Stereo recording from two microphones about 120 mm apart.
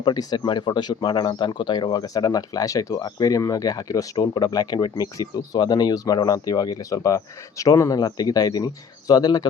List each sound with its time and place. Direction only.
0.0 s speech: 35° left (ahead or behind)